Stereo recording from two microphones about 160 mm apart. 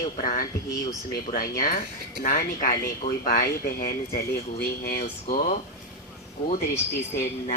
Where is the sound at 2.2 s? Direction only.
55° left (ahead or behind); by 5.0 s 70° left (ahead or behind).